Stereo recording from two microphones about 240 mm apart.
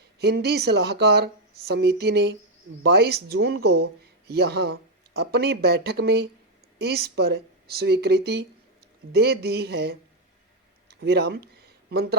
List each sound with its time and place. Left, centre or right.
0.2 s speech: right
11.0 s speech: right